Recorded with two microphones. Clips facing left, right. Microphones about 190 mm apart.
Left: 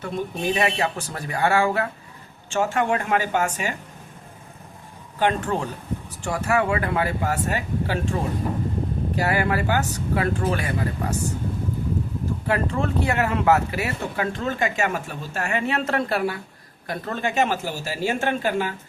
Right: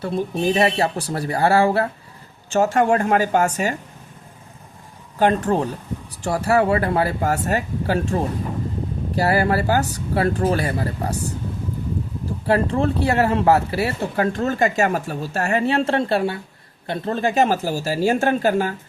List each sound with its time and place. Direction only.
0.0 s speech: 35° right (ahead or behind)
5.2 s speech: 35° right (ahead or behind)
12.5 s speech: 35° right (ahead or behind)